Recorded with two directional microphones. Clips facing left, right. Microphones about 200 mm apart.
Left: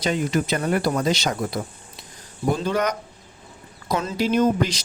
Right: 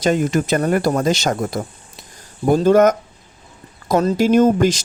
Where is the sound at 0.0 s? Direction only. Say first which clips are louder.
Right 5 dB; 45° right (ahead or behind).